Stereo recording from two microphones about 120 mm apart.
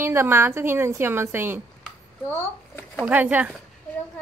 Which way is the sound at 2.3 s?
15° left (ahead or behind).